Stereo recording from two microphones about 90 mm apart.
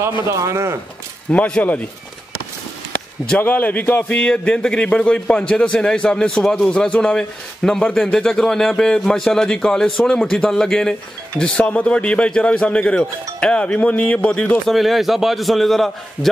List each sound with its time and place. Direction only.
0.3 s a man's voice: 35° right (ahead or behind)
1.3 s speech: 15° left (ahead or behind)
3.3 s speech: 20° left (ahead or behind)
14.7 s a man's voice: centre (ahead or behind)